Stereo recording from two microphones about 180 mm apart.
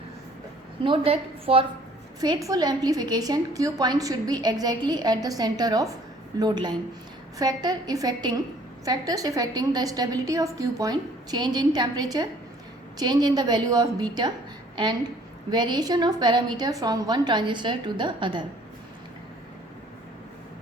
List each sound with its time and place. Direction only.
0.9 s a woman's voice: 30° right (ahead or behind)
2.2 s a woman's voice: 20° right (ahead or behind)
15.4 s a woman's voice: 25° right (ahead or behind)